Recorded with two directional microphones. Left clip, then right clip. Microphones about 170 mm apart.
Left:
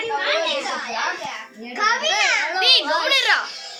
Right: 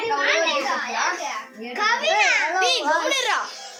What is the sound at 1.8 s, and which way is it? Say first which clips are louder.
Speech: left 2 dB; 25° left (ahead or behind).